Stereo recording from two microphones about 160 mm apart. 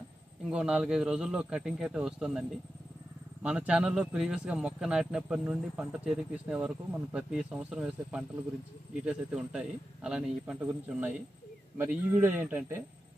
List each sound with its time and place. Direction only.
0.5 s speech: 5° right (ahead or behind)